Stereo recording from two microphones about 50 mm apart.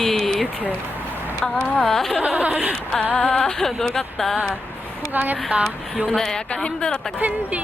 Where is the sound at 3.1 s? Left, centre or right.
Centre.